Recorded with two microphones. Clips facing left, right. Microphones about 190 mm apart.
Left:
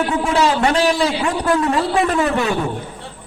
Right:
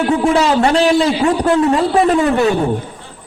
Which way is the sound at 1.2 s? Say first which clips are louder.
Right 5 dB; 30° right (ahead or behind).